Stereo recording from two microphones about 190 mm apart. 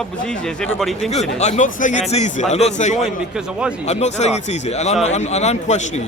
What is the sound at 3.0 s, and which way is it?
Speech, 5° right (ahead or behind).